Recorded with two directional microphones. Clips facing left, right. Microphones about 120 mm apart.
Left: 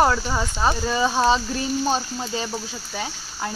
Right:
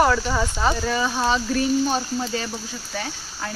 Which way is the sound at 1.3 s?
25° left (ahead or behind).